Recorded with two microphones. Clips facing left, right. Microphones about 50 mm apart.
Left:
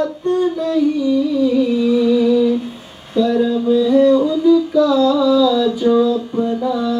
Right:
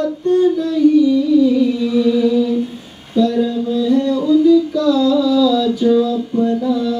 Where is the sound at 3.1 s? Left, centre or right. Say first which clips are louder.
Even; centre.